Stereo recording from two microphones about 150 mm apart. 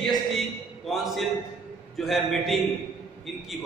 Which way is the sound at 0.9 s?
Centre (ahead or behind).